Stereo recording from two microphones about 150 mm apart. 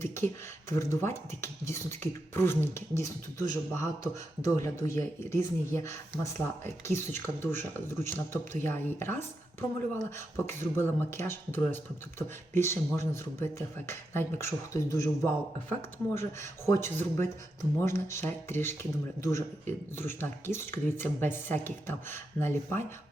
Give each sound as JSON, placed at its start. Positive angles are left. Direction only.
{"t": 0.7, "sound": "speech", "side_deg": 20}